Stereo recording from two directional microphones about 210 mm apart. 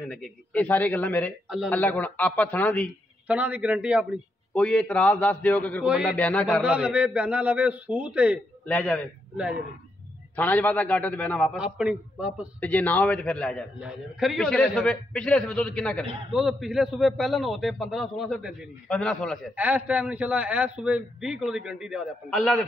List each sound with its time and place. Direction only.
0.1 s a man's voice: 5° left (ahead or behind)
3.3 s a man's voice: 5° right (ahead or behind)
5.9 s a man's voice: 5° right (ahead or behind)
6.1 s a man's voice: 5° left (ahead or behind)
6.6 s a man's voice: 5° right (ahead or behind)
8.6 s a man's voice: 5° left (ahead or behind)
10.3 s a man's voice: 10° left (ahead or behind)
12.5 s a man's voice: 5° left (ahead or behind)